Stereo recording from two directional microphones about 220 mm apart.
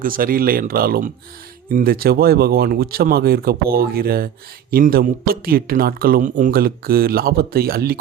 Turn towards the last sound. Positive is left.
turn(degrees=-45)  # may be behind; listen again after turning